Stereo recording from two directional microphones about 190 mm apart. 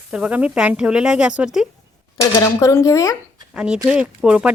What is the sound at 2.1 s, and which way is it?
Speech, 15° left (ahead or behind).